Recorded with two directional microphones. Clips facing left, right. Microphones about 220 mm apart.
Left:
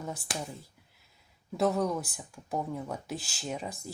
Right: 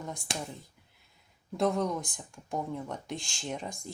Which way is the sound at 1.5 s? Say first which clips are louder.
Left 1 dB; 5° left (ahead or behind).